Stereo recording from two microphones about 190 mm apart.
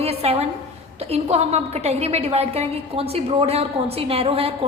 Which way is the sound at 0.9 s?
35° right (ahead or behind).